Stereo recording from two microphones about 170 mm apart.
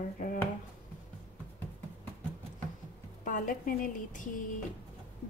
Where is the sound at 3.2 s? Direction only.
50° left (ahead or behind).